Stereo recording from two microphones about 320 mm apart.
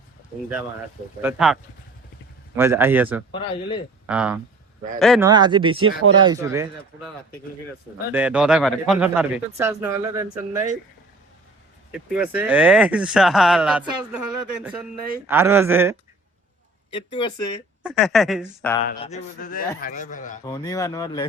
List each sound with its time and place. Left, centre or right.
1.2 s speech: centre
2.6 s speech: centre
3.3 s speech: centre
4.0 s speech: centre
5.3 s speech: centre
8.1 s speech: centre
11.9 s speech: centre
16.9 s speech: centre
17.8 s speech: centre
18.9 s a man's voice: left
20.4 s speech: centre